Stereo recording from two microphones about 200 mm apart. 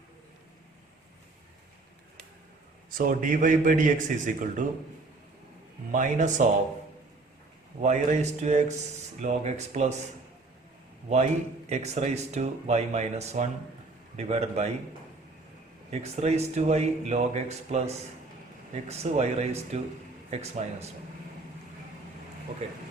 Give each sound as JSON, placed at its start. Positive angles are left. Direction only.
{"t": 2.9, "sound": "speech", "side_deg": -45}
{"t": 5.9, "sound": "speech", "side_deg": -40}
{"t": 7.8, "sound": "speech", "side_deg": -35}
{"t": 11.7, "sound": "speech", "side_deg": -35}
{"t": 15.9, "sound": "speech", "side_deg": -30}
{"t": 22.6, "sound": "speech", "side_deg": -35}